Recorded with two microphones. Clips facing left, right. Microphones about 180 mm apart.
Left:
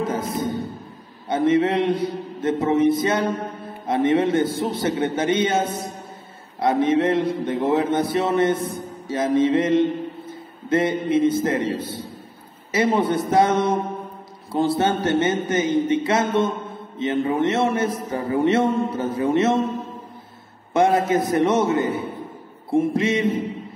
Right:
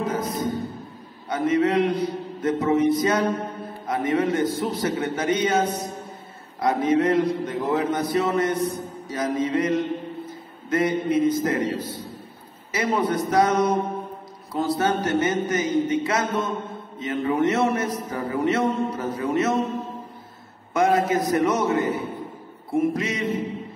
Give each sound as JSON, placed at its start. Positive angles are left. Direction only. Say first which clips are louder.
{"t": 0.0, "sound": "music", "louder": "left 1 dB", "side_deg": 25}
{"t": 1.3, "sound": "a man's voice", "louder": "left 2 dB", "side_deg": 25}
{"t": 20.7, "sound": "a man's voice", "louder": "left 2 dB", "side_deg": 25}